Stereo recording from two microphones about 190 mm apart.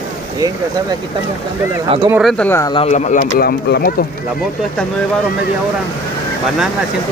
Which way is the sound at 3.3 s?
55° left (ahead or behind).